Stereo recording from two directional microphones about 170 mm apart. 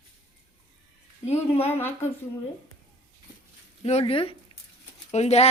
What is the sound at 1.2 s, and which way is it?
Speech, 35° left (ahead or behind).